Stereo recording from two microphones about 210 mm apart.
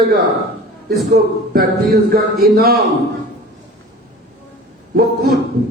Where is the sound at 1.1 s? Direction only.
50° right (ahead or behind).